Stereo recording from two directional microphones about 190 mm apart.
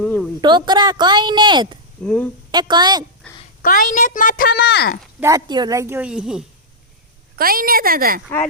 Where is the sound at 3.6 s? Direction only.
45° left (ahead or behind).